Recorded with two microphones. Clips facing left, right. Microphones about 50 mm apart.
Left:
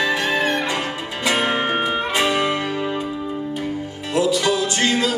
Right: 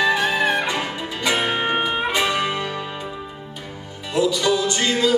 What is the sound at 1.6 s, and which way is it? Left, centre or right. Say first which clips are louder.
Music: left 1 dB; centre.